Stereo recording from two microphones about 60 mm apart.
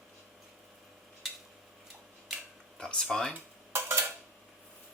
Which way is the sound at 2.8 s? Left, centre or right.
Centre.